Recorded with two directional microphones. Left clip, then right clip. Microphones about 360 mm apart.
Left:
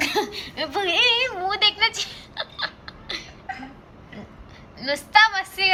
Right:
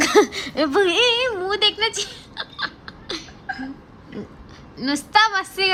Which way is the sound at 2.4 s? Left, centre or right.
Centre.